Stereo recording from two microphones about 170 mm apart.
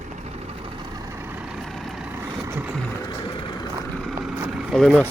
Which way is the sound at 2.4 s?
10° right (ahead or behind).